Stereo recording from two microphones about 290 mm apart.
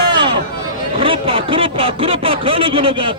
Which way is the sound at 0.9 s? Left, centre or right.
Centre.